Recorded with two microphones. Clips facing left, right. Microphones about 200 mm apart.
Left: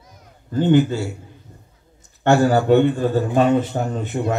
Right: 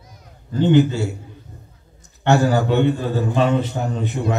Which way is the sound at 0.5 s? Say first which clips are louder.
Right 1 dB; 50° left (ahead or behind).